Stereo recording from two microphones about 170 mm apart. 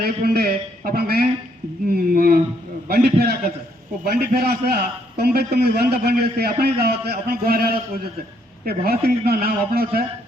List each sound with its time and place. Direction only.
0.0 s a man's voice: 65° right (ahead or behind)